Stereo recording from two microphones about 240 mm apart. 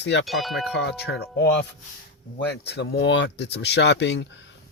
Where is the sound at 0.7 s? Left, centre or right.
Left.